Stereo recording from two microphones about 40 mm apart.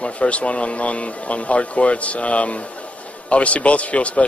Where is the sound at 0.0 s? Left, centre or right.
Left.